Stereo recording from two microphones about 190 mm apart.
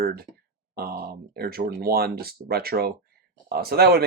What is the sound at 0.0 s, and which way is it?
Speech, 55° right (ahead or behind).